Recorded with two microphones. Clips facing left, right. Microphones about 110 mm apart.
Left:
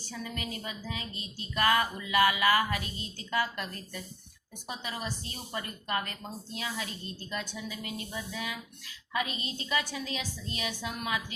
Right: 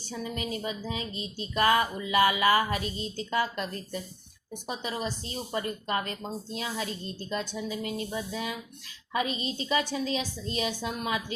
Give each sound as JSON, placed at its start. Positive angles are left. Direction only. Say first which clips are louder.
{"t": 0.1, "sound": "speech", "louder": "right 5 dB", "side_deg": -25}